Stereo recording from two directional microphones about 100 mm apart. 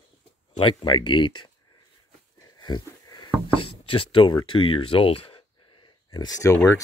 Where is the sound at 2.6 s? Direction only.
45° left (ahead or behind).